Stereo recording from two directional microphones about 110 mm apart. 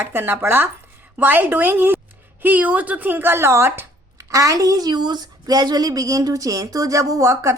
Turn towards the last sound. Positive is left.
turn(degrees=-30)  # may be behind; listen again after turning